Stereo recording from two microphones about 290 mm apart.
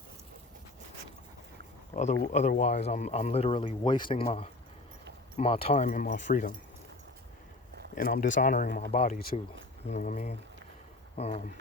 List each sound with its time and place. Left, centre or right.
1.9 s speech: left
7.9 s speech: left